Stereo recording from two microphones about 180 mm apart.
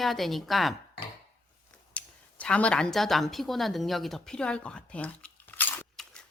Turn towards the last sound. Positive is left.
turn(degrees=5)  # may be behind; listen again after turning